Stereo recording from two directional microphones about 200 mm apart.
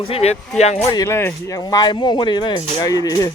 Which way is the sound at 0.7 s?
15° left (ahead or behind).